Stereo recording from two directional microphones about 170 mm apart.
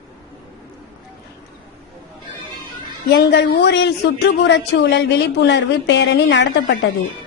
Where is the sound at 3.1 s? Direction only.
75° left (ahead or behind).